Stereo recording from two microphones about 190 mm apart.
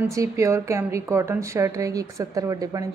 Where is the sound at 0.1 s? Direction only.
15° right (ahead or behind).